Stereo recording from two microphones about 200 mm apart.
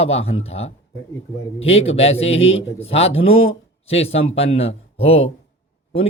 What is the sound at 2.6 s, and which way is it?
Speech, 30° left (ahead or behind).